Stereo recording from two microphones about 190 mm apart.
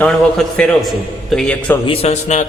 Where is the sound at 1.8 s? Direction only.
30° left (ahead or behind).